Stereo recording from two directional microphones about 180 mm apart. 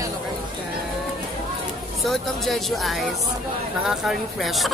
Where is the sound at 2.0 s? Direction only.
Centre (ahead or behind).